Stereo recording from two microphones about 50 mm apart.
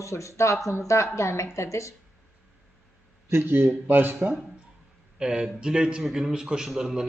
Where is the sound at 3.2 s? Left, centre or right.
Right.